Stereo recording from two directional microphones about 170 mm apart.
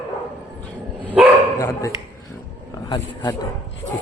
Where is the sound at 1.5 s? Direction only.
20° left (ahead or behind).